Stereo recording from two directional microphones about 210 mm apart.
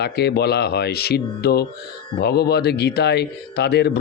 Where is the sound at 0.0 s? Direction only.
50° left (ahead or behind).